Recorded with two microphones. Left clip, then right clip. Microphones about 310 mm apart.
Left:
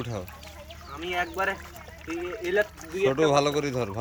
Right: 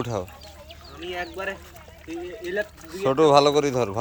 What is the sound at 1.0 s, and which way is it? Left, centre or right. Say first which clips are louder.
Speech: left 3 dB; centre.